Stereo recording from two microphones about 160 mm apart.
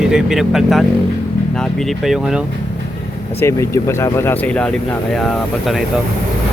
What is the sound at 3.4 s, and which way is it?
Speech, 15° left (ahead or behind).